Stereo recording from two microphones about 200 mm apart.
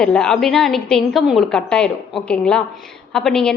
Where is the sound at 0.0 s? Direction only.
5° left (ahead or behind).